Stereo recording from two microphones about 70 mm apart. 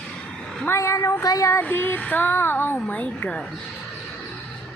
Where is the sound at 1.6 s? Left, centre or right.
Left.